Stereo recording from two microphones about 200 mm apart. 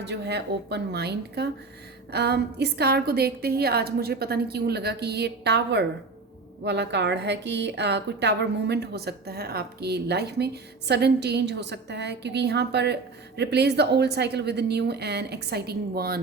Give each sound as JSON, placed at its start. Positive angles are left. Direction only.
{"t": 0.0, "sound": "a woman's voice", "side_deg": -60}